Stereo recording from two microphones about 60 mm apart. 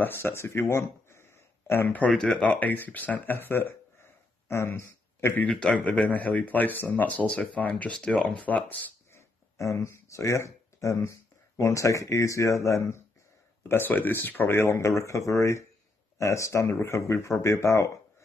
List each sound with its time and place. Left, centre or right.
0.0 s speech: left
2.0 s speech: centre; by 5.4 s left
5.4 s speech: centre
9.1 s a sound: left
10.0 s speech: left
13.7 s speech: left
14.6 s speech: left